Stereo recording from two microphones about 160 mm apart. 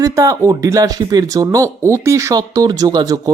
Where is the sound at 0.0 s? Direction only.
20° right (ahead or behind).